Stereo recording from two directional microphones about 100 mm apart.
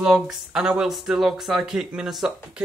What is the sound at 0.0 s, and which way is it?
Speech, 5° right (ahead or behind).